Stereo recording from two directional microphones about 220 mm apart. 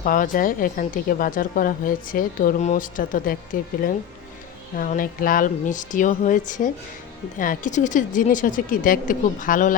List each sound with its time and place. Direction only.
0.0 s speech: 40° left (ahead or behind)